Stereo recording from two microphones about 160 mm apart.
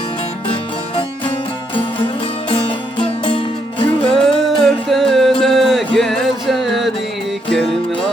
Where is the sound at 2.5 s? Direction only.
35° left (ahead or behind).